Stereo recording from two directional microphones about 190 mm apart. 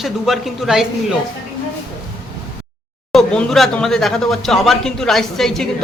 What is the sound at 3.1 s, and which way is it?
Speech, centre (ahead or behind).